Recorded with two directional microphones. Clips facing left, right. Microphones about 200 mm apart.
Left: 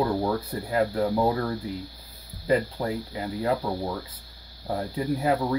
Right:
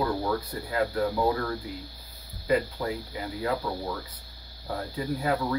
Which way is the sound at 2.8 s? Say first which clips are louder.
Left 2 dB; 30° left (ahead or behind).